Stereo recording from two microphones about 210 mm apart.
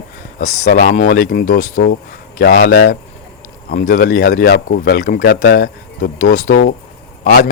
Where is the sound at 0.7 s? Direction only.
40° left (ahead or behind).